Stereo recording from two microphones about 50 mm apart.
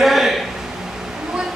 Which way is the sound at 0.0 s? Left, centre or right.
Centre.